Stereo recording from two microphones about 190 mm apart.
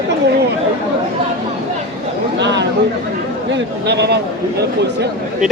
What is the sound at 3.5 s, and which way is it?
A man's voice, 60° right (ahead or behind).